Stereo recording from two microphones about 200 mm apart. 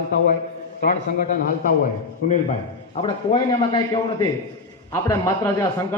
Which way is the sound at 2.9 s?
25° left (ahead or behind).